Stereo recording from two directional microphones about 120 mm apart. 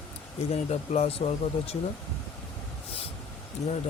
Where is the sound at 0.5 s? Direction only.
60° left (ahead or behind).